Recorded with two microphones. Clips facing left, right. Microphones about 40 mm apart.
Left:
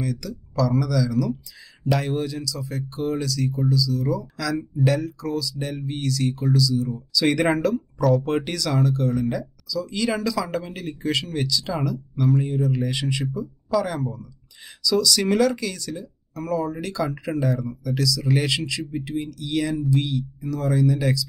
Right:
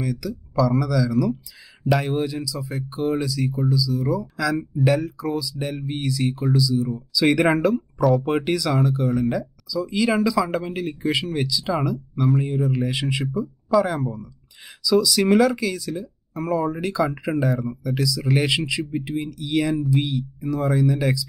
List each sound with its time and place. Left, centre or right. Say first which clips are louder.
0.0 s speech: right 2 dB; centre